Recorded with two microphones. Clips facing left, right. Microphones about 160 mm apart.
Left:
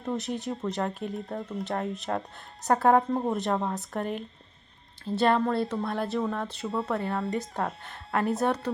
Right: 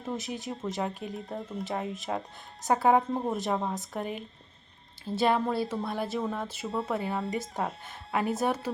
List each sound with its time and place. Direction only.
0.0 s speech: centre (ahead or behind)